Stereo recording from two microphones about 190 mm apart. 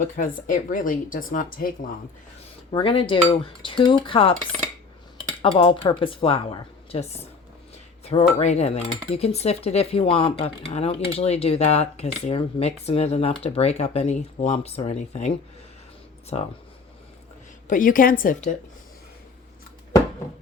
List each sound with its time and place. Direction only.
0.0 s speech: 45° left (ahead or behind)
2.7 s cutlery: 30° left (ahead or behind)
5.5 s cutlery: 30° left (ahead or behind)
8.0 s speech: 35° left (ahead or behind)
16.3 s speech: 30° left (ahead or behind)
17.7 s speech: 45° left (ahead or behind)